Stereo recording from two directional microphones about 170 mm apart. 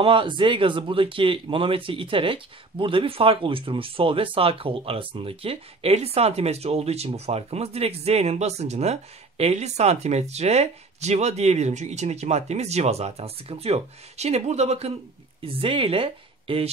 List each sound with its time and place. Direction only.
0.0 s speech: 30° right (ahead or behind)